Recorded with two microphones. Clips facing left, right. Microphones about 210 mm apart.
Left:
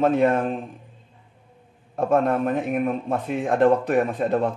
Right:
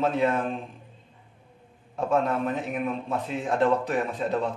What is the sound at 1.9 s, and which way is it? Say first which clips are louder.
Speech: left 5 dB; 55° left (ahead or behind).